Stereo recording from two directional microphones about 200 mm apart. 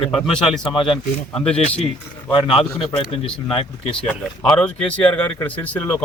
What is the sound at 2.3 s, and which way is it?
Speech, 25° left (ahead or behind).